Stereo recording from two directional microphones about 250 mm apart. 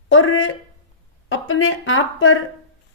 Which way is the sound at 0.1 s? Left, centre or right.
Left.